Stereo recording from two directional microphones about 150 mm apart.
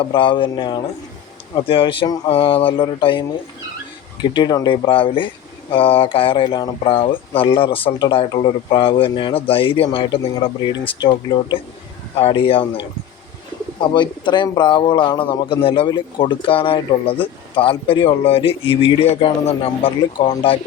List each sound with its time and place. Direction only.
0.0 s a man's voice: 35° left (ahead or behind)
13.8 s a man's voice: 30° left (ahead or behind)